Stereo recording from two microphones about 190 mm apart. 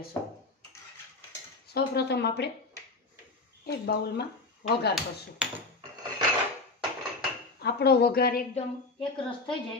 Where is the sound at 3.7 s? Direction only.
55° left (ahead or behind).